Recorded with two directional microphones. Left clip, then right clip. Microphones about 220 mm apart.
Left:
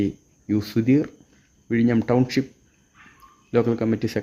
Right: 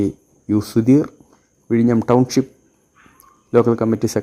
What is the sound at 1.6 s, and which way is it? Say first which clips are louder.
Speech: right 5 dB; 15° right (ahead or behind).